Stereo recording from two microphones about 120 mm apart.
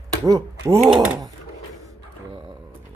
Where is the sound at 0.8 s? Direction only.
5° right (ahead or behind).